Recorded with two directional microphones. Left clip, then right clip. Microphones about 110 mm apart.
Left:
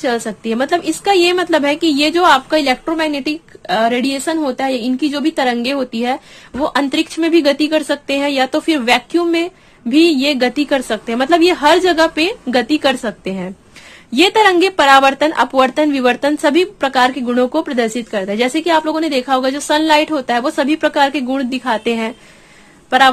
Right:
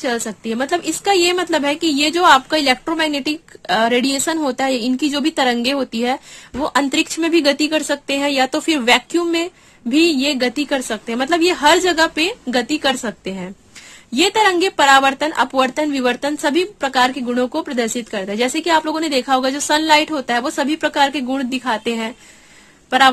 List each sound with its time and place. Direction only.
0.0 s a woman's voice: 30° right (ahead or behind)
11.5 s speech: 35° right (ahead or behind); by 22.1 s 20° right (ahead or behind)